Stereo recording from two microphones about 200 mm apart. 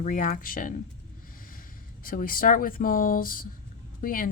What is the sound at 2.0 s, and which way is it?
Speech, 45° left (ahead or behind).